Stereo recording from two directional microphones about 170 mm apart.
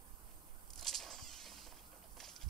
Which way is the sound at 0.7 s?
Centre (ahead or behind).